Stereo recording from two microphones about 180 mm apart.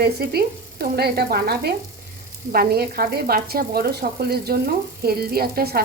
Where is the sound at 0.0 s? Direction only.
60° right (ahead or behind).